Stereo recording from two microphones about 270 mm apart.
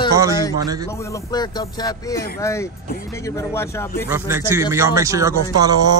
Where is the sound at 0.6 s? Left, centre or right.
Centre.